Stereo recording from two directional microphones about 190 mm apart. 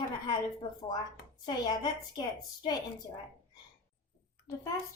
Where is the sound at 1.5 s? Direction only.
20° left (ahead or behind).